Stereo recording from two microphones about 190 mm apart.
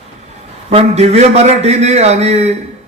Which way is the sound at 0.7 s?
35° right (ahead or behind).